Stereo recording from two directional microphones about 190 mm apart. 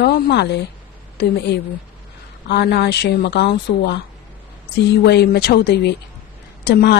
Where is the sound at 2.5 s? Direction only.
60° left (ahead or behind).